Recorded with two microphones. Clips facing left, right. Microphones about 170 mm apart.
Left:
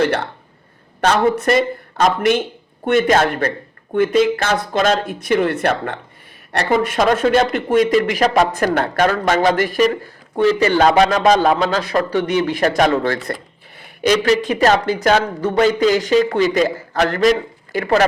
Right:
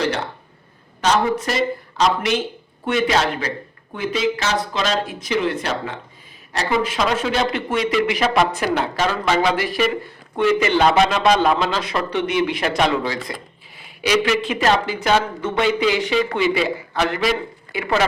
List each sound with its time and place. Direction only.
1.0 s a man's voice: 60° left (ahead or behind)
14.3 s a man's voice: 40° left (ahead or behind)